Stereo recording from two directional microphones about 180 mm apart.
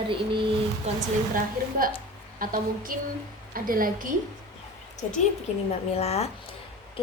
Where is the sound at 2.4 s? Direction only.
50° right (ahead or behind).